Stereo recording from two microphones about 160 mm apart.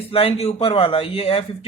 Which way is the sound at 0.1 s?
40° left (ahead or behind).